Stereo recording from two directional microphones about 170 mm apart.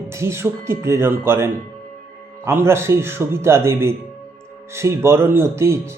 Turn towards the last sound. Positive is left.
turn(degrees=-15)  # may be behind; listen again after turning